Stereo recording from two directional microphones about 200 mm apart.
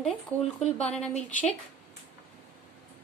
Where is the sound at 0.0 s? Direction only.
35° left (ahead or behind).